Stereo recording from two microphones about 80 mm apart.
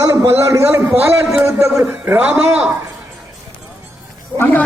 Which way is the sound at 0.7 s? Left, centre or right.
Right.